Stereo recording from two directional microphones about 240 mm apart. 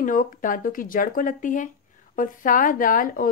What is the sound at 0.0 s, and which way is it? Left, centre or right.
A woman's voice, left.